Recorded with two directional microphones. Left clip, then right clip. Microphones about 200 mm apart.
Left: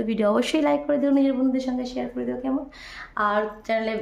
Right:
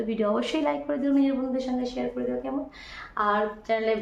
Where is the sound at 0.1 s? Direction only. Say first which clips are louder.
Left 5 dB; 60° left (ahead or behind).